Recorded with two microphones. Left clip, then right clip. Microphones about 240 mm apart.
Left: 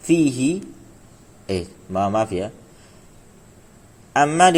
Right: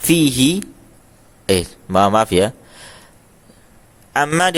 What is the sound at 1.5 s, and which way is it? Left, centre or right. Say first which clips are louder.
Speech: right 9 dB; right.